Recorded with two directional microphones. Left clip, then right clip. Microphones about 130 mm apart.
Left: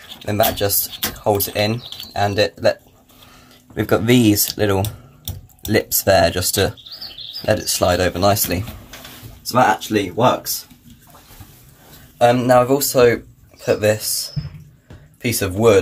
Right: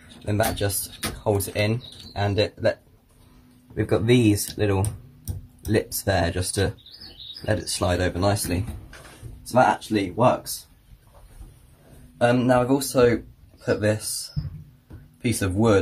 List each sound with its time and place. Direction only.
0.2 s speech: 10° left (ahead or behind)
3.7 s speech: 20° left (ahead or behind)
12.2 s speech: 5° left (ahead or behind)
15.2 s speech: 15° left (ahead or behind)